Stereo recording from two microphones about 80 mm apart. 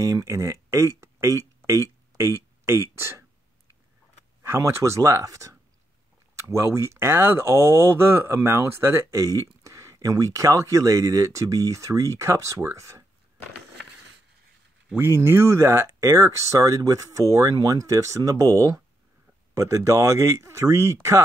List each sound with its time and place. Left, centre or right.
0.0 s speech: right
1.7 s a sound: right
4.4 s speech: right
9.2 s speech: right
15.0 s speech: right